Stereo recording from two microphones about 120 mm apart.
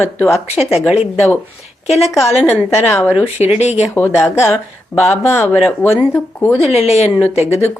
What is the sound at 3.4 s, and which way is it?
Speech, 65° left (ahead or behind).